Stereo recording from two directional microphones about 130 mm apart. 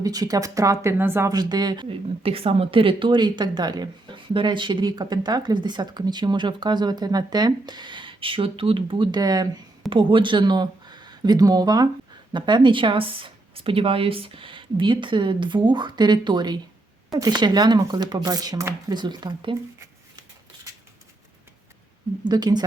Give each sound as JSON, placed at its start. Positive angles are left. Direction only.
{"t": 0.0, "sound": "speech", "side_deg": -30}
{"t": 1.3, "sound": "speech", "side_deg": -30}
{"t": 22.2, "sound": "speech", "side_deg": -30}